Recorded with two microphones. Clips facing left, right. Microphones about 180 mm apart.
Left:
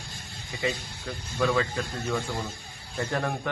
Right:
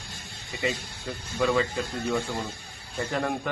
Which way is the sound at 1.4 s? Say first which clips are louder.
Right 1 dB; 15° right (ahead or behind).